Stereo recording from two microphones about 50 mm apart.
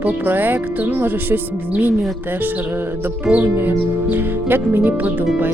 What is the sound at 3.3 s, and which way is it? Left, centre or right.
Speech, right.